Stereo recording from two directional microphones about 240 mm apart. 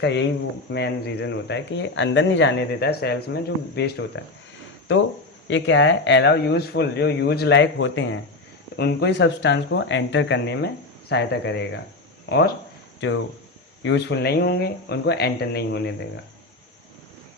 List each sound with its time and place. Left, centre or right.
0.0 s speech: left
5.5 s speech: left
13.0 s speech: left